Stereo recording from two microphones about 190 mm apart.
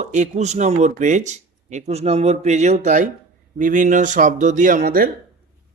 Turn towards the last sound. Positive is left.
turn(degrees=-50)  # may be behind; listen again after turning